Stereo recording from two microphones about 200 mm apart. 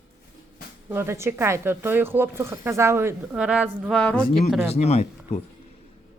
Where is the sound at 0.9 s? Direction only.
10° right (ahead or behind); by 4.2 s 5° left (ahead or behind).